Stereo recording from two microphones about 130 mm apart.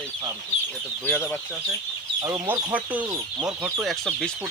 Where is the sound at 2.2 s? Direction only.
25° right (ahead or behind).